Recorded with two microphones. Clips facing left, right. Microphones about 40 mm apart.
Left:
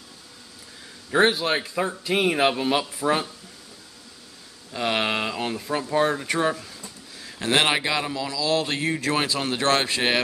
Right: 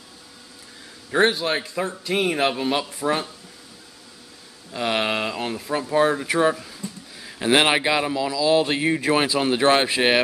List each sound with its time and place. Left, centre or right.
1.1 s speech: centre
4.7 s speech: centre